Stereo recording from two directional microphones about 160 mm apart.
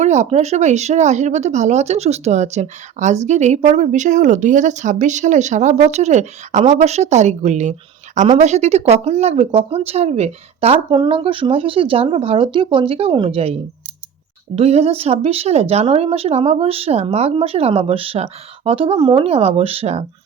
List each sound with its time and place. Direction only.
0.0 s speech: 45° right (ahead or behind)